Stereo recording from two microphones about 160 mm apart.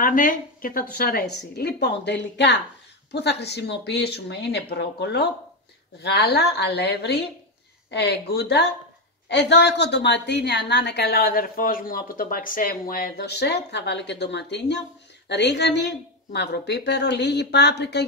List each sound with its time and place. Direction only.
0.0 s a woman's voice: 55° left (ahead or behind); by 18.0 s 90° left